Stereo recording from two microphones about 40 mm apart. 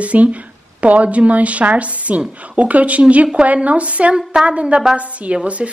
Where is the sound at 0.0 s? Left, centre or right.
Right.